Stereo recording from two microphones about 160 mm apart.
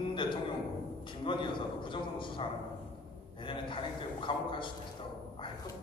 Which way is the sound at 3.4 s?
30° left (ahead or behind).